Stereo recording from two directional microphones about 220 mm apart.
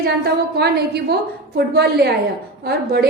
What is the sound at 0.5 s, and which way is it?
A woman's voice, 45° right (ahead or behind).